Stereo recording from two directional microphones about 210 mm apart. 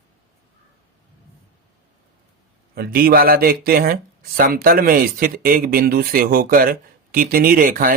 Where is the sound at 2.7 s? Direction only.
45° right (ahead or behind).